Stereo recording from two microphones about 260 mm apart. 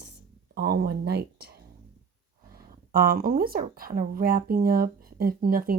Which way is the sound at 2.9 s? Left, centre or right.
Right.